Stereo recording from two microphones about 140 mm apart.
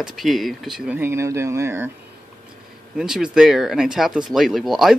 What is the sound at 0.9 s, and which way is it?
Speech, 15° right (ahead or behind).